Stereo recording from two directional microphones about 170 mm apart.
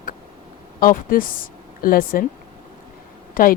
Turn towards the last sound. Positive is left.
turn(degrees=60)  # may be behind; listen again after turning